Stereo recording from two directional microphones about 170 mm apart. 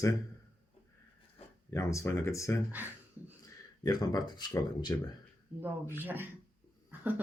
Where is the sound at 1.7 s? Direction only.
15° left (ahead or behind).